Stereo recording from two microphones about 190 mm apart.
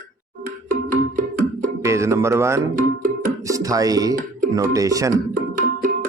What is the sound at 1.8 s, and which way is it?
Speech, 15° right (ahead or behind).